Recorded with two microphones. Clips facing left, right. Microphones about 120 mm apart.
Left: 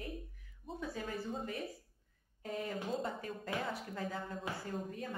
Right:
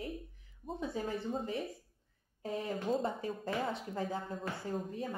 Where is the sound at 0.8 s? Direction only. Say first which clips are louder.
Right 4 dB; 25° right (ahead or behind).